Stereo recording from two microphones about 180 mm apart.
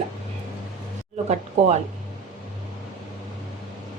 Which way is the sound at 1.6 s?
35° right (ahead or behind).